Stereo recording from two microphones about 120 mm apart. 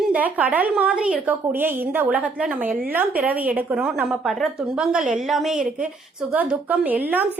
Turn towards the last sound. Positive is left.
turn(degrees=-15)  # may be behind; listen again after turning